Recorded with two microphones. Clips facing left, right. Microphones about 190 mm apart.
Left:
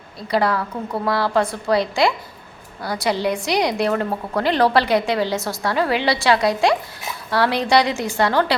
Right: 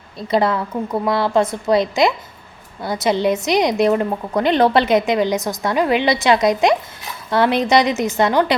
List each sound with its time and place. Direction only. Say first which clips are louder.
0.2 s a woman's voice: right 2 dB; 20° right (ahead or behind)